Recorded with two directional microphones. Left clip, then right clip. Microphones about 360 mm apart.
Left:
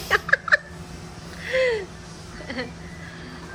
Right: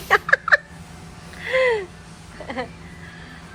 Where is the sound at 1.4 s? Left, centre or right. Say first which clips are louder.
Right 3 dB; centre.